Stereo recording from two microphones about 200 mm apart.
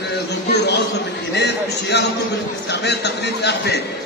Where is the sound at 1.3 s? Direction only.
55° left (ahead or behind).